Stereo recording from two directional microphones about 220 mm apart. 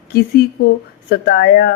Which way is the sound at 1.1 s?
45° left (ahead or behind).